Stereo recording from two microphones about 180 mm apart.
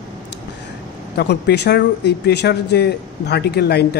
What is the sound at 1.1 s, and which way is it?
Speech, 70° left (ahead or behind).